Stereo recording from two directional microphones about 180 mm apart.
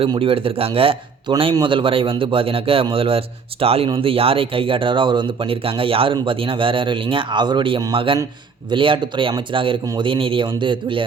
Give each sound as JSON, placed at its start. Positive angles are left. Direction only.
{"t": 0.0, "sound": "a man's voice", "side_deg": -30}